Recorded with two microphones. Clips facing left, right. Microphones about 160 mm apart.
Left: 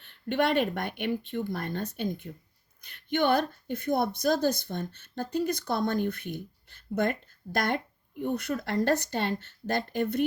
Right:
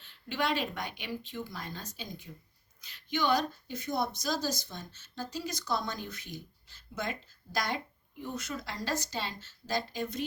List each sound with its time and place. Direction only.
0.0 s a woman's voice: 55° left (ahead or behind)